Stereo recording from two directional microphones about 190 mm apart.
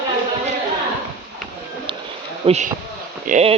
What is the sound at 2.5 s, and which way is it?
Speech, 40° right (ahead or behind).